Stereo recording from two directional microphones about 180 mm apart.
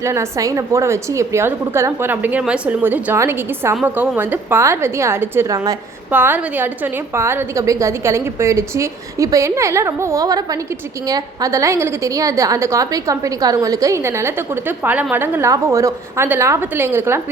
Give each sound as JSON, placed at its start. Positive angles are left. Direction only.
{"t": 0.0, "sound": "a woman's voice", "side_deg": -15}